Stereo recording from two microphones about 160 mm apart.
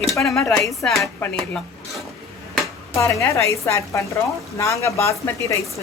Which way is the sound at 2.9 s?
20° left (ahead or behind).